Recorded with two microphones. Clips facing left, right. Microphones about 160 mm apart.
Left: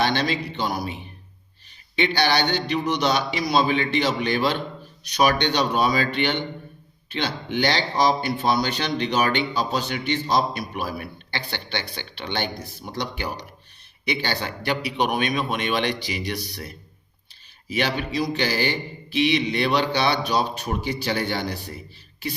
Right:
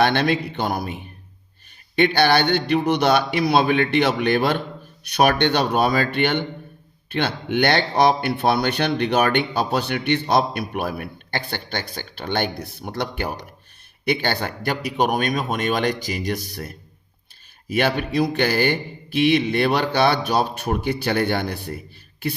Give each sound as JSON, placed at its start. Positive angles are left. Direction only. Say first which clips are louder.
{"t": 0.0, "sound": "a man's voice", "louder": "right 4 dB", "side_deg": -55}